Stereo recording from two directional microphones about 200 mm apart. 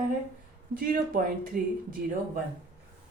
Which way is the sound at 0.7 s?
45° right (ahead or behind).